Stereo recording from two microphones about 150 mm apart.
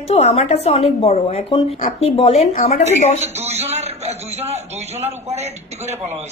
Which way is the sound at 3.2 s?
45° right (ahead or behind).